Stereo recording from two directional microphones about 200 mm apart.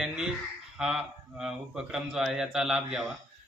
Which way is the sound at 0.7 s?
5° right (ahead or behind).